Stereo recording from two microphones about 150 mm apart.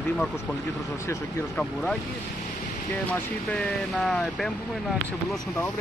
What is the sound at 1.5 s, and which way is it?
Speech, 5° left (ahead or behind).